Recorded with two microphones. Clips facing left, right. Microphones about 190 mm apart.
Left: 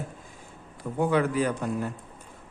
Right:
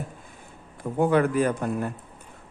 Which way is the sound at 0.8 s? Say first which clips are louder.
Right 3 dB; 50° right (ahead or behind).